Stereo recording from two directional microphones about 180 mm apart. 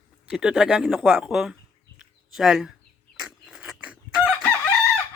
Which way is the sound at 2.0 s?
Centre (ahead or behind).